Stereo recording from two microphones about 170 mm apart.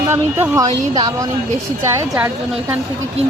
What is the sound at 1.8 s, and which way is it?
Speech, 10° right (ahead or behind).